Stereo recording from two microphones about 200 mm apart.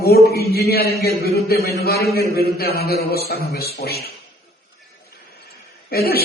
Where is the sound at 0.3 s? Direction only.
50° left (ahead or behind).